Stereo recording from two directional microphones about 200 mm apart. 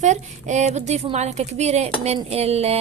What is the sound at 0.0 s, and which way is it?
A woman's voice, 35° right (ahead or behind).